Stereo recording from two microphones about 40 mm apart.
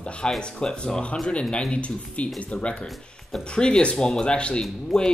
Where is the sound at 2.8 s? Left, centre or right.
Centre.